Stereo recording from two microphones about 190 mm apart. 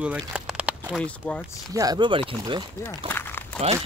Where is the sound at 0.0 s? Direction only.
5° right (ahead or behind).